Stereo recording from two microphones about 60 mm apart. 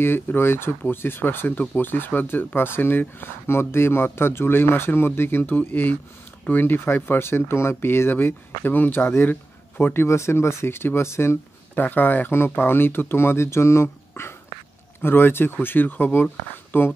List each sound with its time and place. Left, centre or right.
0.0 s speech: left
10.0 s speech: left
11.7 s speech: left